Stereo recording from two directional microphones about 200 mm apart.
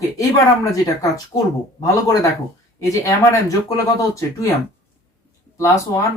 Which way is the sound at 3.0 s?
15° left (ahead or behind).